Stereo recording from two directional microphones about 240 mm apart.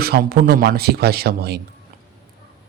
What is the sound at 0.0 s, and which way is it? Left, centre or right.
Speech, right.